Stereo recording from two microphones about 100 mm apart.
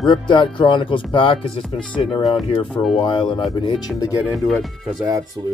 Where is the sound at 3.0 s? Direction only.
50° left (ahead or behind).